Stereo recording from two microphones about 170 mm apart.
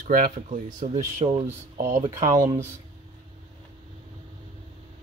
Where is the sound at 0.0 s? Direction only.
55° right (ahead or behind).